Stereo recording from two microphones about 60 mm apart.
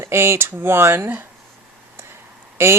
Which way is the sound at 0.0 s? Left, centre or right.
Right.